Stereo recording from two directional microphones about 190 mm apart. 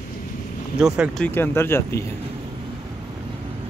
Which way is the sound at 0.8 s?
5° right (ahead or behind).